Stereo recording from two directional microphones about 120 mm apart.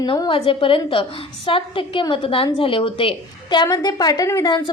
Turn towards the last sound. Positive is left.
turn(degrees=30)  # may be behind; listen again after turning